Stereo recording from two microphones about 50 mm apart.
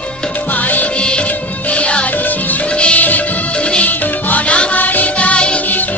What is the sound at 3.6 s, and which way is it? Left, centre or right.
Music, left.